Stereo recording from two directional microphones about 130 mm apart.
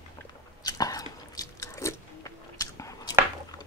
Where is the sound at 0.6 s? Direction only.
30° left (ahead or behind).